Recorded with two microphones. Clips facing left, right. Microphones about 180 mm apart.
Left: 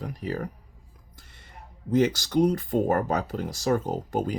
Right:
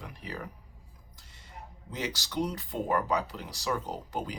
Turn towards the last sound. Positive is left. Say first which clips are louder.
# left 8 dB
turn(degrees=50)  # may be behind; listen again after turning